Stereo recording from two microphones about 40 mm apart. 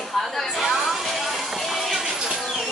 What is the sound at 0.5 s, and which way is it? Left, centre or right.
Chatter, centre.